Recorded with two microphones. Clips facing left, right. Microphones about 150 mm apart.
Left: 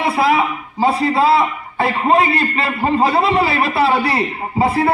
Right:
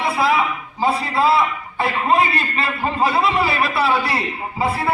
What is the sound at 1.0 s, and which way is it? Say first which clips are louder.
A man's voice: left 3 dB; 25° left (ahead or behind).